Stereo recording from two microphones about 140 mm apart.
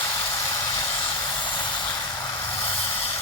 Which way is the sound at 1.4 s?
35° left (ahead or behind).